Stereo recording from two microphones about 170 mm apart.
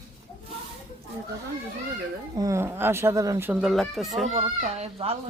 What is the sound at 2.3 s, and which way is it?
Speech, 20° right (ahead or behind).